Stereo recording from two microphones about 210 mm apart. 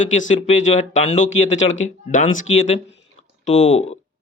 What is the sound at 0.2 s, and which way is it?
A man's voice, 30° left (ahead or behind).